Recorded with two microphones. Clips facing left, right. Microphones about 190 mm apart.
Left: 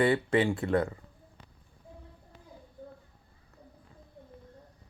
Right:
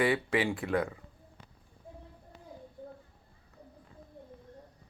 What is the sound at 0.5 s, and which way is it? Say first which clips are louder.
Speech: left 3 dB; 15° right (ahead or behind).